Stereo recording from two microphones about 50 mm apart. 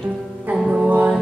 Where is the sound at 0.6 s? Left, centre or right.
Right.